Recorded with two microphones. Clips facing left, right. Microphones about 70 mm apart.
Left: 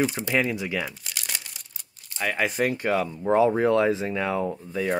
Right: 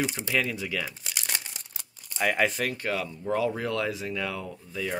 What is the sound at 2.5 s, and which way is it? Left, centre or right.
Speech, left.